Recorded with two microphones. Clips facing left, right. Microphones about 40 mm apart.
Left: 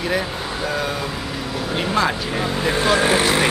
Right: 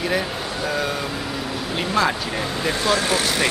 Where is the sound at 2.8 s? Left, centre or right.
Left.